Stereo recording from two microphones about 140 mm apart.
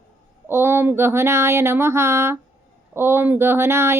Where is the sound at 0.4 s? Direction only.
15° right (ahead or behind).